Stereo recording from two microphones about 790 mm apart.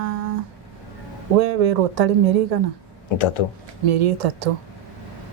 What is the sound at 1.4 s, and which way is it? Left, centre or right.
A woman's voice, right.